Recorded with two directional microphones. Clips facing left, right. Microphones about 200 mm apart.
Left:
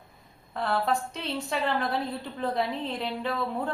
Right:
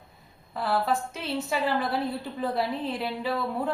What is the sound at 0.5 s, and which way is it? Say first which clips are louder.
A woman's voice: right 1 dB; 5° right (ahead or behind).